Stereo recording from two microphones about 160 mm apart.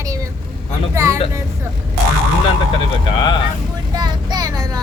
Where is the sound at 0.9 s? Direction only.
20° right (ahead or behind).